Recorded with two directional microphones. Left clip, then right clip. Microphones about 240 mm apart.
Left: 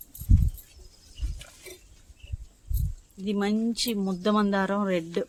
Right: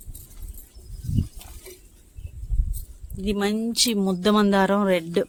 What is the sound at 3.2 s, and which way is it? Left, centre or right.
Speech, right.